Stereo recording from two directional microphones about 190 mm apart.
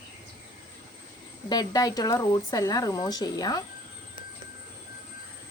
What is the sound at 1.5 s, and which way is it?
A woman's voice, 20° left (ahead or behind).